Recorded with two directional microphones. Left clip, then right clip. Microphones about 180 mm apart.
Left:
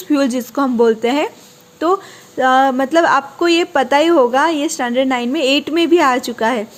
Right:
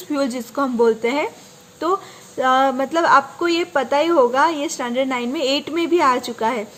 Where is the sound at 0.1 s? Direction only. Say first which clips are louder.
Left 6 dB; 30° left (ahead or behind).